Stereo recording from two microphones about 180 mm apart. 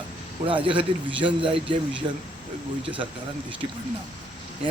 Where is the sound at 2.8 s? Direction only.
30° right (ahead or behind).